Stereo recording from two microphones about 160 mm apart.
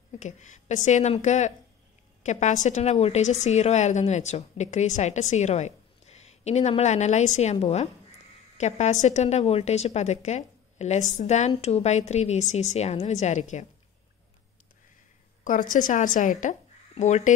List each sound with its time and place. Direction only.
0.2 s a woman's voice: 50° left (ahead or behind)
15.4 s a woman's voice: 55° left (ahead or behind)